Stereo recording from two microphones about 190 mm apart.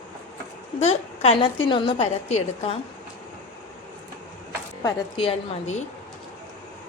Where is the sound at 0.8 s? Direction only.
35° left (ahead or behind).